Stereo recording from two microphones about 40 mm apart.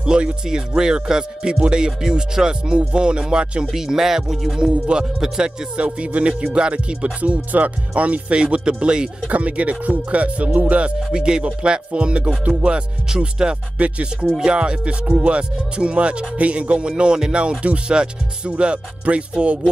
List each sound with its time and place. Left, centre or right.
0.0 s speech: right
3.6 s speech: centre
4.6 s speech: right
9.3 s music: right
11.1 s speech: right
14.6 s speech: right